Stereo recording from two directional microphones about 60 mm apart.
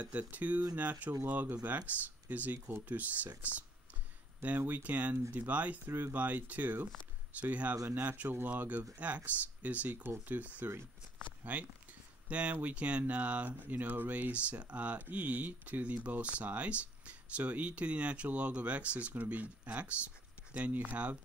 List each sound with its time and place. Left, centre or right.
0.0 s speech: right
5.9 s speech: right
6.1 s speech: right